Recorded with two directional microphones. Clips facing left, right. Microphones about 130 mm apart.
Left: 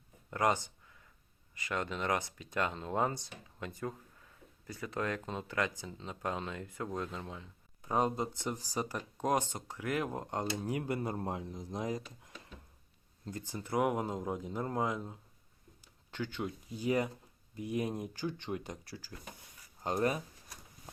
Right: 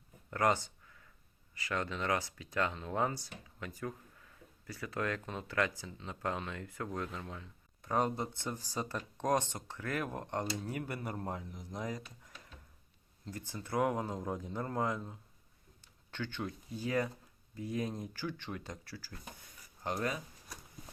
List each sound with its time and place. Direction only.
0.3 s speech: 20° left (ahead or behind)
7.8 s a sound: 10° left (ahead or behind)
8.0 s speech: 20° left (ahead or behind)
13.3 s speech: 20° left (ahead or behind)